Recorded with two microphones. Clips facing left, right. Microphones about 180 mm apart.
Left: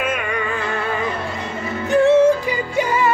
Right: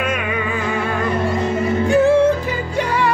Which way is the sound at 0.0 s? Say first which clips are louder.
Right 1 dB; centre (ahead or behind).